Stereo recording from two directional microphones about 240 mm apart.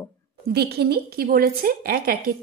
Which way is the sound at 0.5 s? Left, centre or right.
Right.